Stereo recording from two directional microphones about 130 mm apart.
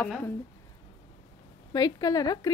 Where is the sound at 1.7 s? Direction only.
30° left (ahead or behind).